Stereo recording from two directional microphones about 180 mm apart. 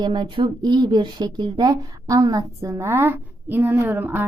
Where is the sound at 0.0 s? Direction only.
25° right (ahead or behind).